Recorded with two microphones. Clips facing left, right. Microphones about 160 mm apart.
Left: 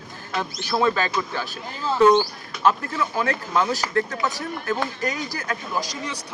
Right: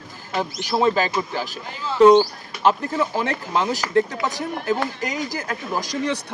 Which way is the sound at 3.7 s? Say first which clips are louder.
Right 4 dB; 15° right (ahead or behind).